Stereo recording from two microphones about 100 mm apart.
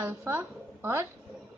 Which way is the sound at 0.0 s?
20° right (ahead or behind).